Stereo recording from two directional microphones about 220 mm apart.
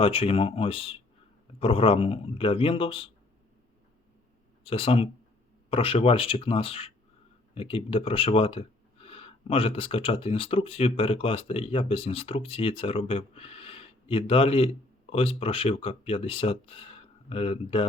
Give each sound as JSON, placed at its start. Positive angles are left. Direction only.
{"t": 0.0, "sound": "speech", "side_deg": 25}
{"t": 4.6, "sound": "speech", "side_deg": 25}